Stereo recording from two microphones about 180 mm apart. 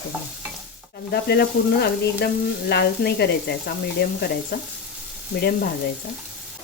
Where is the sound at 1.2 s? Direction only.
65° left (ahead or behind).